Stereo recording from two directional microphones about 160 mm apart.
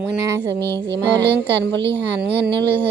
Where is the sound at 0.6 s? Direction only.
15° left (ahead or behind).